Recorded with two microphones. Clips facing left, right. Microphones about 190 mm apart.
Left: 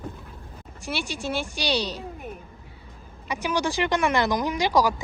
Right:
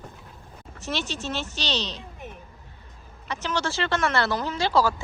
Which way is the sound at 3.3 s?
10° left (ahead or behind).